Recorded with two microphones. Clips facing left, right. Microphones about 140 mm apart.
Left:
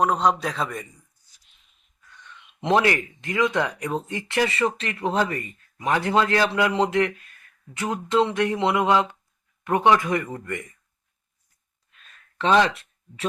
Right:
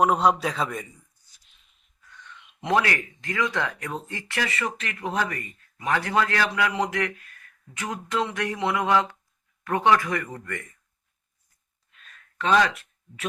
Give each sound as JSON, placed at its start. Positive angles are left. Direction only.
{"t": 0.0, "sound": "a man's voice", "side_deg": -5}
{"t": 2.6, "sound": "speech", "side_deg": 25}
{"t": 12.4, "sound": "speech", "side_deg": 25}